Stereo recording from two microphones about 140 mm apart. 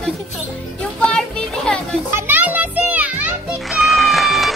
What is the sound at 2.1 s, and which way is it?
Music, 15° right (ahead or behind).